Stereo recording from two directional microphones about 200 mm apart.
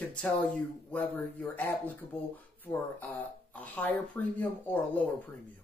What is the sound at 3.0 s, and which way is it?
Speech, 10° left (ahead or behind).